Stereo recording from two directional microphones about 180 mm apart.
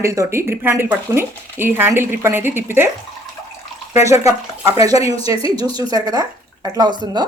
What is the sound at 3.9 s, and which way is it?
Speech, 15° right (ahead or behind).